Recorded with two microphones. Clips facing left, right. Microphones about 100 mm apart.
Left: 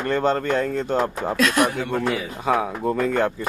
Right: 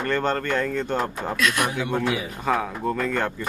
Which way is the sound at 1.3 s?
35° left (ahead or behind).